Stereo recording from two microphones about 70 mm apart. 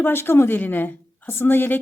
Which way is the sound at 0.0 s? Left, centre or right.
Left.